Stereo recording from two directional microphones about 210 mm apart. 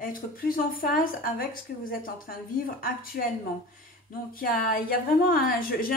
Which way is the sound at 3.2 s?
45° left (ahead or behind).